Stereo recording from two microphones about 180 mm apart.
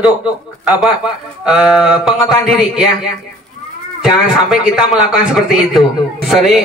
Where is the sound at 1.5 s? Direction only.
5° right (ahead or behind).